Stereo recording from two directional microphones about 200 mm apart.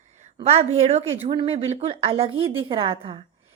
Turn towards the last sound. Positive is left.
turn(degrees=-25)  # may be behind; listen again after turning